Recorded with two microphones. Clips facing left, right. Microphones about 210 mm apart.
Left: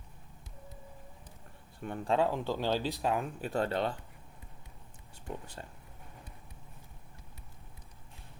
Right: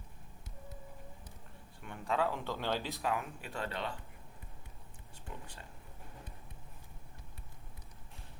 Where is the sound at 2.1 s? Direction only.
15° left (ahead or behind).